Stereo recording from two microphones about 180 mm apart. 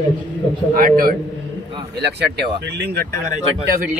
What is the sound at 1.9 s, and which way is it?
Speech, 65° right (ahead or behind).